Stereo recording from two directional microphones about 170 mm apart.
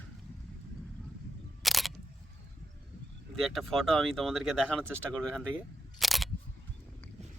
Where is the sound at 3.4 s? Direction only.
Centre (ahead or behind).